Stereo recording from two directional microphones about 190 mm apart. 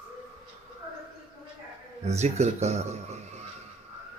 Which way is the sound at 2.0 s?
35° right (ahead or behind).